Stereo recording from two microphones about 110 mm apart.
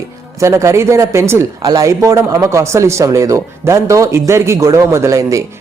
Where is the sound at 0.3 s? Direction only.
25° right (ahead or behind).